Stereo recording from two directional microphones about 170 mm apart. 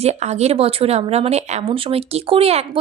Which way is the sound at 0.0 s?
40° right (ahead or behind).